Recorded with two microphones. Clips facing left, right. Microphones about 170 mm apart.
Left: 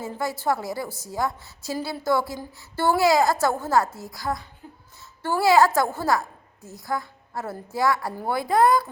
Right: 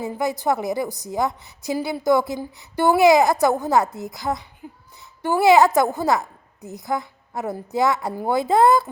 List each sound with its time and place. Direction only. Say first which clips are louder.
0.0 s a woman's voice: right 4 dB; 20° right (ahead or behind)